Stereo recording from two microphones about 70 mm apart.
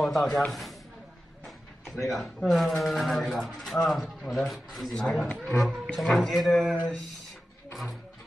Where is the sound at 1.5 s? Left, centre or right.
Centre.